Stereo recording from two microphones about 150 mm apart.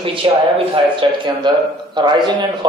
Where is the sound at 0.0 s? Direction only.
35° right (ahead or behind).